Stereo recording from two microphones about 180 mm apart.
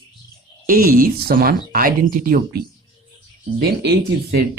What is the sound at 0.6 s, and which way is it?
Speech, 55° right (ahead or behind).